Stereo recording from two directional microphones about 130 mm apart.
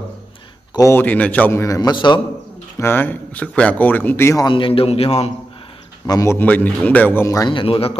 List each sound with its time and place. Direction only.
0.7 s speech: 20° left (ahead or behind)
1.8 s a man's voice: 35° left (ahead or behind)
2.8 s speech: 15° left (ahead or behind)
4.5 s a man's voice: 40° left (ahead or behind)
6.0 s speech: 25° left (ahead or behind)
6.3 s speech: 15° left (ahead or behind)
7.2 s speech: 25° left (ahead or behind)
7.5 s a man's voice: 45° left (ahead or behind)